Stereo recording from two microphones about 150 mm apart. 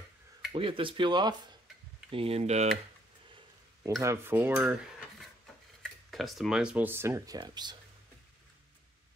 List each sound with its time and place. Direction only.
0.5 s speech: 35° right (ahead or behind)
4.0 s dishes: 15° right (ahead or behind)
5.8 s speech: centre (ahead or behind); by 7.7 s 30° right (ahead or behind)